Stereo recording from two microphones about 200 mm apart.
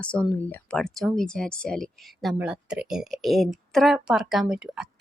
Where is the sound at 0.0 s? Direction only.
5° left (ahead or behind).